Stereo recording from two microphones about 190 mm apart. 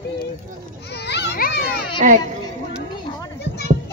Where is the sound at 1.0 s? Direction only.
60° left (ahead or behind).